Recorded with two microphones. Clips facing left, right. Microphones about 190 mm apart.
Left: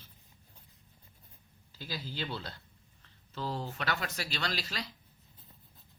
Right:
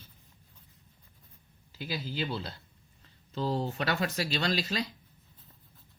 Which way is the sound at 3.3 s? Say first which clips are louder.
Right 6 dB; 25° right (ahead or behind).